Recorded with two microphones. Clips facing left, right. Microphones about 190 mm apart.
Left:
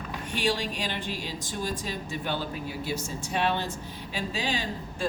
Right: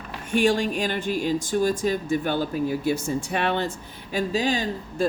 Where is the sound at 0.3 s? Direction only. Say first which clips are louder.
Right 8 dB; 50° right (ahead or behind).